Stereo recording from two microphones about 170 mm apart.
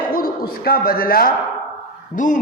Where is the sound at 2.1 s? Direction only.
50° left (ahead or behind).